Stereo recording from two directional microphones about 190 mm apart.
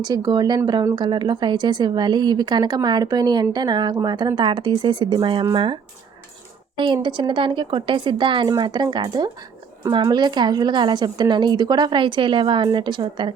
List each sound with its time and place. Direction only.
0.0 s speech: 20° right (ahead or behind)